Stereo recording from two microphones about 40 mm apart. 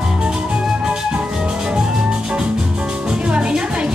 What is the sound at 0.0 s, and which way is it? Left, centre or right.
Music, right.